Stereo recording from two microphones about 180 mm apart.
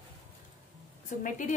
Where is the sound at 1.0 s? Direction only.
45° left (ahead or behind).